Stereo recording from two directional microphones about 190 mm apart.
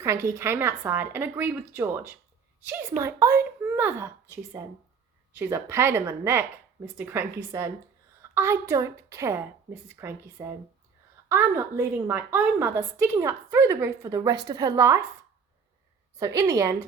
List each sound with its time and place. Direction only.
0.0 s a woman's voice: 15° right (ahead or behind)
16.1 s a woman's voice: 15° right (ahead or behind)